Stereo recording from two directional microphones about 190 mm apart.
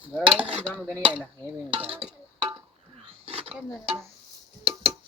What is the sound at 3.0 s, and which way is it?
Roaring cats, 30° right (ahead or behind).